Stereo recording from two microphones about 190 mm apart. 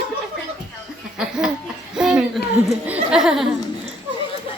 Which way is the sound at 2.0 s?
5° right (ahead or behind).